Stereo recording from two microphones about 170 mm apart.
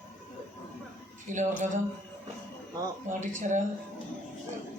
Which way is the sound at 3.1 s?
50° right (ahead or behind).